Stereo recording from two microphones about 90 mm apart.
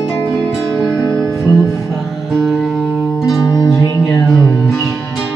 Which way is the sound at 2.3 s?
Centre (ahead or behind).